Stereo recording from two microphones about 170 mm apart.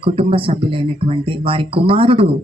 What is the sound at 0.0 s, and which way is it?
Speech, 35° right (ahead or behind).